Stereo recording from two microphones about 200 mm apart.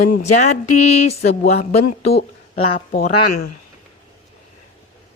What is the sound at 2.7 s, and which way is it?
Speech, 50° left (ahead or behind).